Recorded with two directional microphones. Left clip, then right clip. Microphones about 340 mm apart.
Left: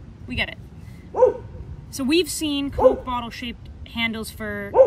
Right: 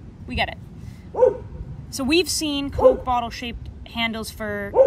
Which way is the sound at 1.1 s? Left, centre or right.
Left.